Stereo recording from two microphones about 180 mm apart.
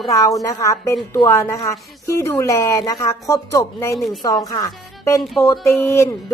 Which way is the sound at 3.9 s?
Centre (ahead or behind).